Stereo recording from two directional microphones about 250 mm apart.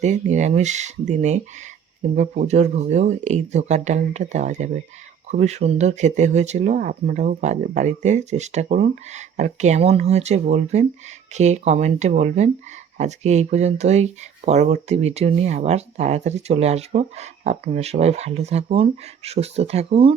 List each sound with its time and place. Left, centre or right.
0.0 s speech: right